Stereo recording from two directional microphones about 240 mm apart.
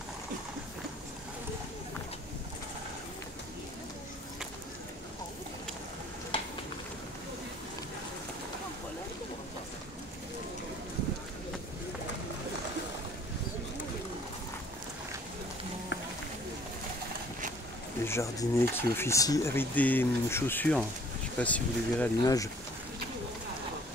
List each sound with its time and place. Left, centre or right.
18.0 s speech: centre